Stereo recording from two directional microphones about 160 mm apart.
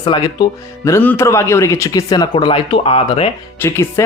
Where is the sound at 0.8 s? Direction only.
15° left (ahead or behind); by 3.3 s 35° left (ahead or behind).